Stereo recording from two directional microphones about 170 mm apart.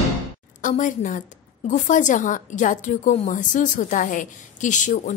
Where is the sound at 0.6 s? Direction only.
50° left (ahead or behind).